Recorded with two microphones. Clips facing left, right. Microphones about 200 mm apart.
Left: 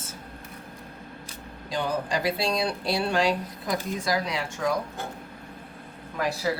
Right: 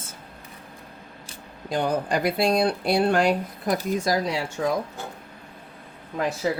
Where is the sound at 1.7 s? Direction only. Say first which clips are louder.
Right 4 dB; 50° right (ahead or behind).